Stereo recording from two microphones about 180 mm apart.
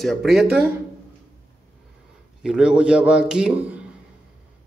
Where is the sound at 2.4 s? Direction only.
5° right (ahead or behind).